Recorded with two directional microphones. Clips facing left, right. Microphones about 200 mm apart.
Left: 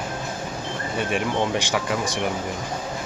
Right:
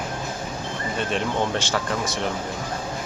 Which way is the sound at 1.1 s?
15° left (ahead or behind).